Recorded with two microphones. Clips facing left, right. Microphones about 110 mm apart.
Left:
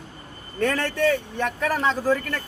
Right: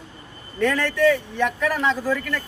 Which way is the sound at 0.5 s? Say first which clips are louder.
Right 2 dB; 40° left (ahead or behind).